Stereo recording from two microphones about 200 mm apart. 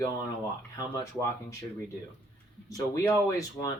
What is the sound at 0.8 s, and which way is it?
Speech, 15° left (ahead or behind).